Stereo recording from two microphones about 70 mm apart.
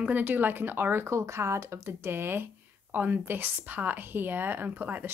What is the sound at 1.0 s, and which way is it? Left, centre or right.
Speech, right.